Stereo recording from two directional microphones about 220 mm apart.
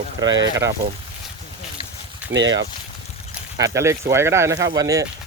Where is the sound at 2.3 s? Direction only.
55° right (ahead or behind).